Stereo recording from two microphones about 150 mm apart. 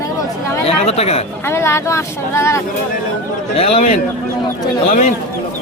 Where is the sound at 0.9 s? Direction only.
45° left (ahead or behind).